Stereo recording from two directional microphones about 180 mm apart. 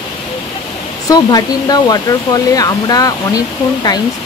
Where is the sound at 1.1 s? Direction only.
20° left (ahead or behind).